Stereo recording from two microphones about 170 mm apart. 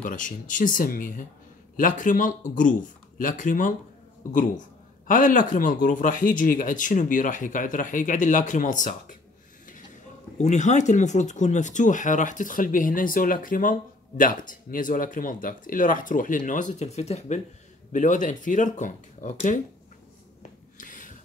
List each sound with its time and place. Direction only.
0.0 s speech: 50° left (ahead or behind)
5.0 s speech: 50° left (ahead or behind)
10.4 s speech: 45° left (ahead or behind)
20.7 s a sound: 50° left (ahead or behind)